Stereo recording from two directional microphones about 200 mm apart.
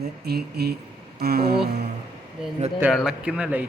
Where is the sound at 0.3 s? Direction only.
50° right (ahead or behind).